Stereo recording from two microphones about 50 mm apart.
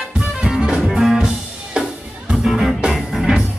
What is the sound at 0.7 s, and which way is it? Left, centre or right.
Music, centre.